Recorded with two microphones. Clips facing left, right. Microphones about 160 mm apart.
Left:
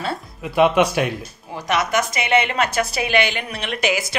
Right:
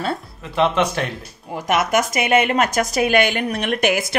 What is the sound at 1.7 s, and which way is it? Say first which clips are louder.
A woman's voice: right 2 dB; 50° right (ahead or behind).